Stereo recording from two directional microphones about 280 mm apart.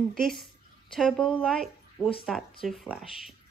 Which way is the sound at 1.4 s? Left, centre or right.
Centre.